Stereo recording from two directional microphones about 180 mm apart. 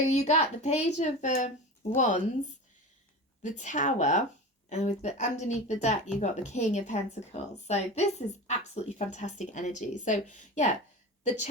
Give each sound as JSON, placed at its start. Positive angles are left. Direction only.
{"t": 0.0, "sound": "a woman's voice", "side_deg": 35}